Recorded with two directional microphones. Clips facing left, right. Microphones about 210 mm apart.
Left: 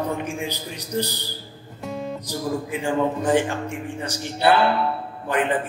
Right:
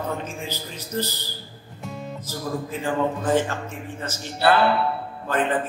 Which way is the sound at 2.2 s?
15° left (ahead or behind).